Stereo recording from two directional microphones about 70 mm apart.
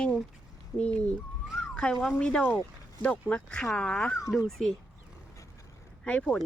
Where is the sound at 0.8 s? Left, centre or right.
Centre.